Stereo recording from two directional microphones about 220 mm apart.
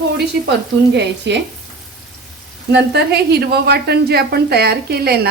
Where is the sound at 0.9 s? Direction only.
50° right (ahead or behind).